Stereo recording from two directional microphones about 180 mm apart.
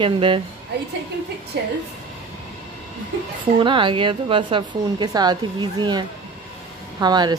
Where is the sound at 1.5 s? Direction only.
65° right (ahead or behind).